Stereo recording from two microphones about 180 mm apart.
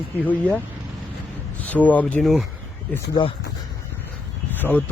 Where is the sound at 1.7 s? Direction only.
10° left (ahead or behind).